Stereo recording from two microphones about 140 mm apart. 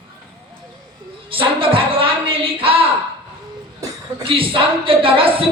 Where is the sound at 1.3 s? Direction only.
40° right (ahead or behind).